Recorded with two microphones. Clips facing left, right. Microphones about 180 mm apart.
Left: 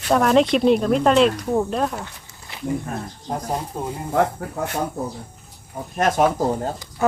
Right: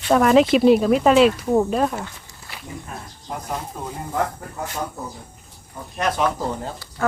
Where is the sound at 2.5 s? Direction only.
20° left (ahead or behind).